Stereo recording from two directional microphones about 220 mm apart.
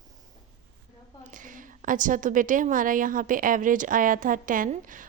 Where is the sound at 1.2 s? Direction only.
35° right (ahead or behind).